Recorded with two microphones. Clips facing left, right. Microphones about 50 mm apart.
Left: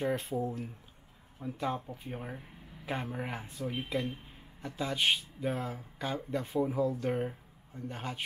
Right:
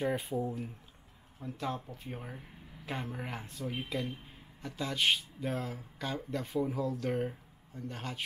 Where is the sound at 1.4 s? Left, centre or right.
Centre.